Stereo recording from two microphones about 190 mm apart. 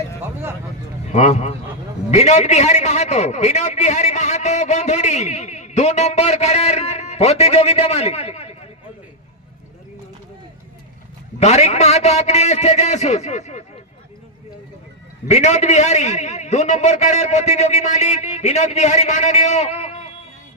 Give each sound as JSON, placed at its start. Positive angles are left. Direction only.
{"t": 1.0, "sound": "a man's voice", "side_deg": 35}
{"t": 11.3, "sound": "a man's voice", "side_deg": 35}
{"t": 15.3, "sound": "a man's voice", "side_deg": 40}